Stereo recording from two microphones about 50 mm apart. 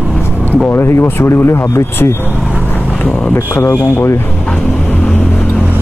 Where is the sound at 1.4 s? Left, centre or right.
Left.